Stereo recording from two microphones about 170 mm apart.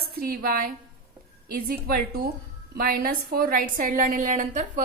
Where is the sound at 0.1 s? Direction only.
60° right (ahead or behind).